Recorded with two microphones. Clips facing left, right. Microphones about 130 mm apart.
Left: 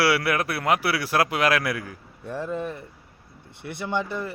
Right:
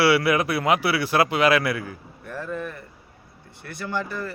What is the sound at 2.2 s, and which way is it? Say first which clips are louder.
Speech: left 2 dB; 25° left (ahead or behind).